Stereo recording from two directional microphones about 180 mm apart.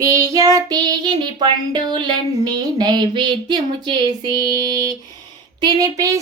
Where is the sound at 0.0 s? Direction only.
20° right (ahead or behind).